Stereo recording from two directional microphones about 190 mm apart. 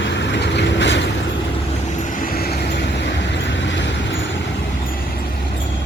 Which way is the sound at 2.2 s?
50° left (ahead or behind).